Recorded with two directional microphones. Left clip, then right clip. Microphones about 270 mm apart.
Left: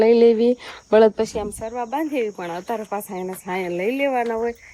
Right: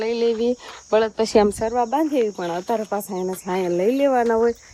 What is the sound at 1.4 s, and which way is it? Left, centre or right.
Speech, right.